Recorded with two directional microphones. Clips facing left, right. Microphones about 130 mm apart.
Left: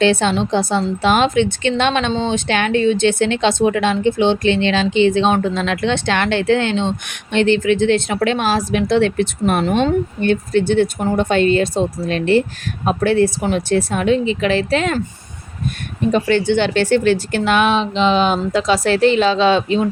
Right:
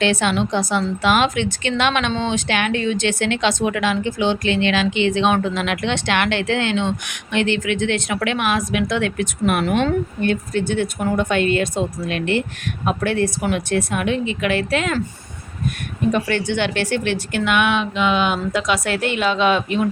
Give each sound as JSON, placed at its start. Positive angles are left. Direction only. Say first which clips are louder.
{"t": 0.0, "sound": "a woman's voice", "louder": "left 4 dB", "side_deg": 30}
{"t": 16.1, "sound": "a woman's voice", "louder": "left 9 dB", "side_deg": 25}